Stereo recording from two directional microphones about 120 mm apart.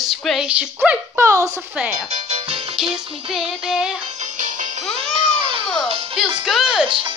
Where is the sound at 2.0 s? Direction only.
60° right (ahead or behind).